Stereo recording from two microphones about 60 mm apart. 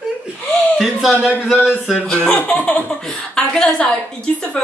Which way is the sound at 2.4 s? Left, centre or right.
Left.